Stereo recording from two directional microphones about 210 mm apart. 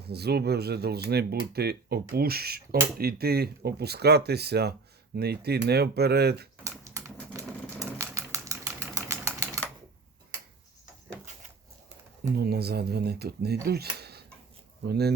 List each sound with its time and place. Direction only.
0.0 s speech: 50° right (ahead or behind)
6.7 s typing: 15° right (ahead or behind)
12.3 s speech: 50° right (ahead or behind)
14.0 s a sound: 50° right (ahead or behind)
14.8 s speech: 50° right (ahead or behind)